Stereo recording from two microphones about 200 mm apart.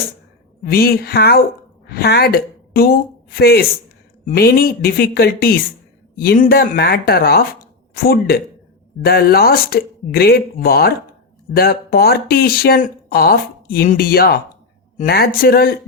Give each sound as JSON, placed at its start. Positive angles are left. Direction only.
{"t": 0.6, "sound": "a woman's voice", "side_deg": 50}